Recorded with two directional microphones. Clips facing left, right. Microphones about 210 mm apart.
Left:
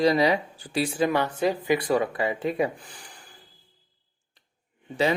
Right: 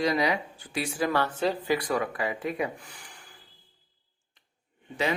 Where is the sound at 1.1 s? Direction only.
15° left (ahead or behind).